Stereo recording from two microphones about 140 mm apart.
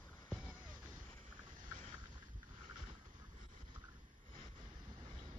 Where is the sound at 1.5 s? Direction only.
75° right (ahead or behind).